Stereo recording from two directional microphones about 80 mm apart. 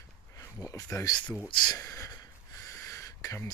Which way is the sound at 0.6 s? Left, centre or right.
Left.